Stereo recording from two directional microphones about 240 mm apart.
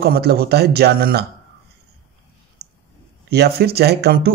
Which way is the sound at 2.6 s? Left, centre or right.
Right.